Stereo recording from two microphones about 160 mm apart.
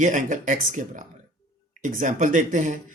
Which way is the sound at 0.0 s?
55° right (ahead or behind).